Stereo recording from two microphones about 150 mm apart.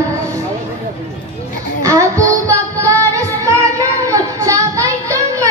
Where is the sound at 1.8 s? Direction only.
20° right (ahead or behind).